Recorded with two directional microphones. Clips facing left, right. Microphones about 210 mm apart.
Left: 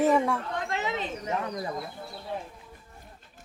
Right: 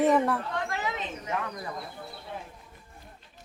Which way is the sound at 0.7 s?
25° left (ahead or behind).